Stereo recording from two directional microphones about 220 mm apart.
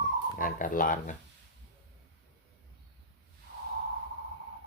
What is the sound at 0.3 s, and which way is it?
Speech, 40° left (ahead or behind).